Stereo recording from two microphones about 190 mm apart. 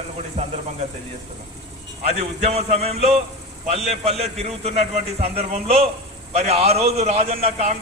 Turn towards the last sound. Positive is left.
turn(degrees=-35)  # may be behind; listen again after turning